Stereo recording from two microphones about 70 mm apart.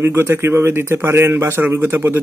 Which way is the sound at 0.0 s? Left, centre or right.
Right.